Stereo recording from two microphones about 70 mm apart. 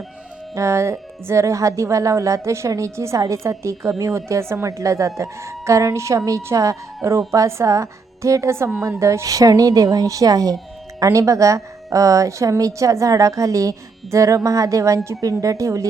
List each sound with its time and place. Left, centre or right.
0.5 s a woman's voice: right
11.0 s a woman's voice: right